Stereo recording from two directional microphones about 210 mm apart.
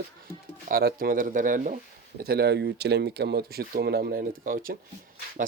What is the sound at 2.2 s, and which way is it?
Speech, 50° right (ahead or behind).